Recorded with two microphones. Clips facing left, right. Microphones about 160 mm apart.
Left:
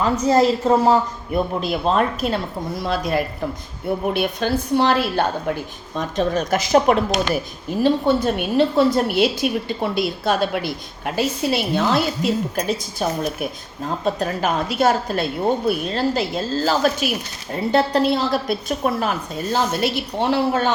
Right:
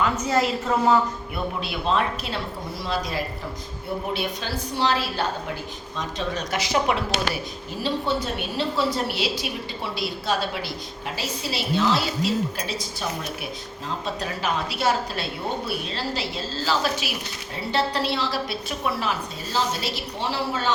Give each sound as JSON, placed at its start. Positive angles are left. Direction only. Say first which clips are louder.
{"t": 0.0, "sound": "a woman's voice", "louder": "left 6 dB", "side_deg": 35}